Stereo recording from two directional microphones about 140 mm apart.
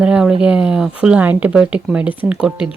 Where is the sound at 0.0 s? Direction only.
5° right (ahead or behind).